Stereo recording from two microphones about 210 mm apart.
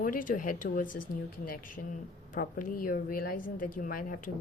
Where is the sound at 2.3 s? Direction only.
40° left (ahead or behind).